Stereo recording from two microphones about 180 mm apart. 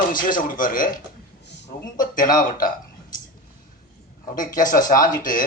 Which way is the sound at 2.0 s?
50° left (ahead or behind).